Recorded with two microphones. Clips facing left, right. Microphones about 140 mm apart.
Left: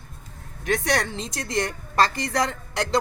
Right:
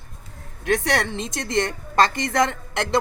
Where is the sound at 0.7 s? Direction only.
20° right (ahead or behind).